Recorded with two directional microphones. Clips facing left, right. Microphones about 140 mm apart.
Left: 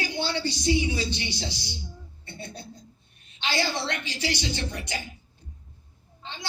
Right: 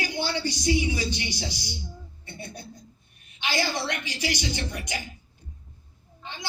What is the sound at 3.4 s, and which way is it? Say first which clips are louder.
A woman's voice: even; 15° right (ahead or behind).